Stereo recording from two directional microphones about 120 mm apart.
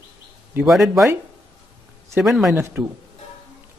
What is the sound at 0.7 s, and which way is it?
Speech, centre (ahead or behind).